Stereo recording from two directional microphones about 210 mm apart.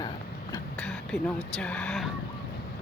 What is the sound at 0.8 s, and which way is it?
Speech, 5° left (ahead or behind).